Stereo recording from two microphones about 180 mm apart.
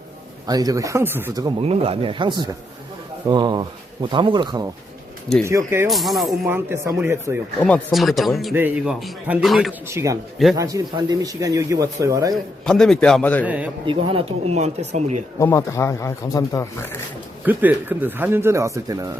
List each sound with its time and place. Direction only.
0.4 s speech: 20° right (ahead or behind)
5.5 s speech: 15° right (ahead or behind)
5.9 s a man's voice: centre (ahead or behind)
6.4 s speech: 15° right (ahead or behind)
7.6 s a man's voice: 5° left (ahead or behind)
9.8 s speech: 15° right (ahead or behind)
12.3 s a man's voice: centre (ahead or behind)
13.4 s speech: 10° right (ahead or behind)
13.8 s speech: 30° right (ahead or behind)
15.4 s speech: 15° left (ahead or behind)
17.4 s speech: 10° right (ahead or behind)